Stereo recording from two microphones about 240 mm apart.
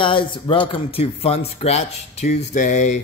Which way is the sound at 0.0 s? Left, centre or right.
Left.